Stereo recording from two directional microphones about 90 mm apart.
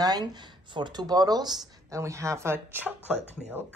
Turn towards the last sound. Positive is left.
turn(degrees=-20)  # may be behind; listen again after turning